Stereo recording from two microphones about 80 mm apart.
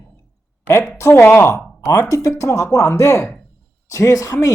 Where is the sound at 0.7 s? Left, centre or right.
Left.